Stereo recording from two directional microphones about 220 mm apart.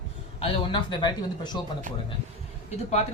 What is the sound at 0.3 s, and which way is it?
Speech, 25° left (ahead or behind).